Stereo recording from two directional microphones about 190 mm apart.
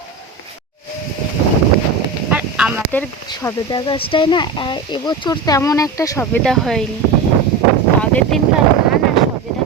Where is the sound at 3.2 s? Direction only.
20° left (ahead or behind).